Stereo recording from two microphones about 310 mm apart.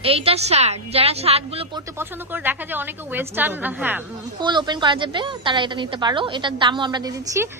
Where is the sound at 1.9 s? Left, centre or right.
Centre.